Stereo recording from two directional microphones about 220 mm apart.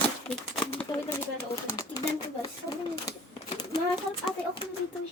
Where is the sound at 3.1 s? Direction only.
20° left (ahead or behind).